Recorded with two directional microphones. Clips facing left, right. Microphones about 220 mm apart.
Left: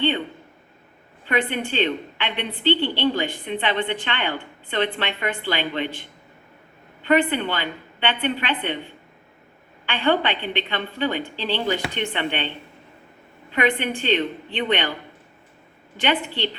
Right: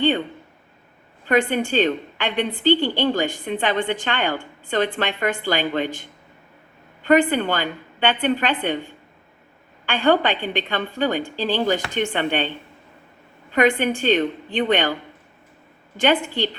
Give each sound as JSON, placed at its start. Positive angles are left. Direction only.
{"t": 1.3, "sound": "a woman's voice", "side_deg": -45}
{"t": 9.8, "sound": "a woman's voice", "side_deg": -45}
{"t": 13.5, "sound": "a woman's voice", "side_deg": -45}
{"t": 16.0, "sound": "a woman's voice", "side_deg": -45}